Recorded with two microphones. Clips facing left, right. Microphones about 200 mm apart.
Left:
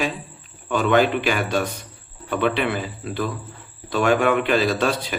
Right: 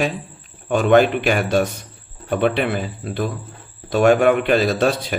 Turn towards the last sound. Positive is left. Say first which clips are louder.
# right 3 dB
turn(degrees=-40)  # may be behind; listen again after turning